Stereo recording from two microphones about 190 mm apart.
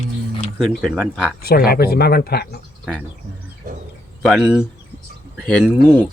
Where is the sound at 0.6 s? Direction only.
Centre (ahead or behind).